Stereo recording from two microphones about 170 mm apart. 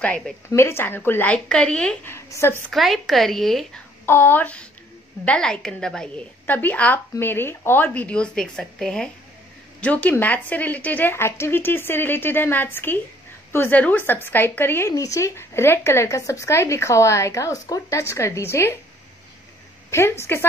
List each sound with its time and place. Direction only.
0.5 s speech: 15° left (ahead or behind)
2.7 s speech: centre (ahead or behind)
4.0 s speech: 15° left (ahead or behind)
19.9 s speech: 15° left (ahead or behind)